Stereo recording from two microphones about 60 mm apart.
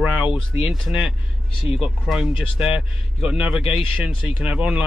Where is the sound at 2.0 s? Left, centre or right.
Centre.